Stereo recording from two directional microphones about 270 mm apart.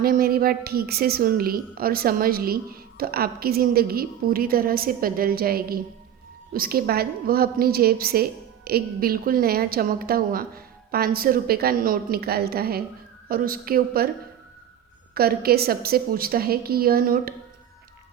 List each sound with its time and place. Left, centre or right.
0.0 s a woman's voice: right
15.1 s a woman's voice: right